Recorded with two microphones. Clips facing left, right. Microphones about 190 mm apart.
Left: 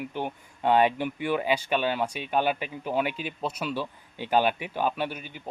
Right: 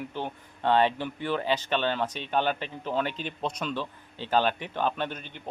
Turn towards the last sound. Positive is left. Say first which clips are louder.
# left 1 dB
turn(degrees=10)  # may be behind; listen again after turning